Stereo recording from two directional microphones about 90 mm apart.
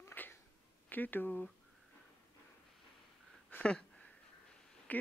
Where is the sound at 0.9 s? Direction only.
20° left (ahead or behind).